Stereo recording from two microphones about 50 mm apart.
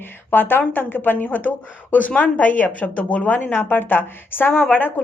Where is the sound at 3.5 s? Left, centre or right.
Left.